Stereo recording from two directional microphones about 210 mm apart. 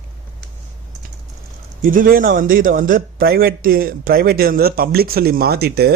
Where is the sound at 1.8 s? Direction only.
40° right (ahead or behind).